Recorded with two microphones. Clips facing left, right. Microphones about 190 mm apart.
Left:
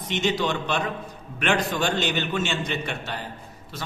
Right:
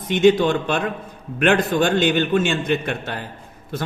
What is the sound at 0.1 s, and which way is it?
A man's voice, 55° right (ahead or behind).